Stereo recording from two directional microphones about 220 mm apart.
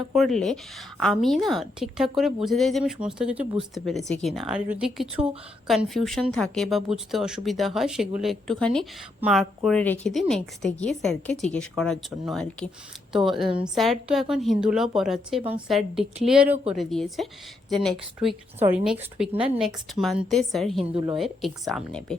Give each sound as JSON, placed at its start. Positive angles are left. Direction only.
{"t": 0.1, "sound": "a woman's voice", "side_deg": 0}
{"t": 19.3, "sound": "speech", "side_deg": -25}
{"t": 19.5, "sound": "a woman's voice", "side_deg": 0}